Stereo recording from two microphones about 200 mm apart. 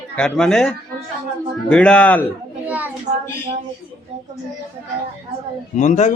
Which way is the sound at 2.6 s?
10° right (ahead or behind).